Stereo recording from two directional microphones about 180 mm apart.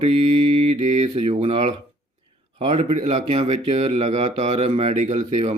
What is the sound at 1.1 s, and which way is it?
Speech, 35° right (ahead or behind).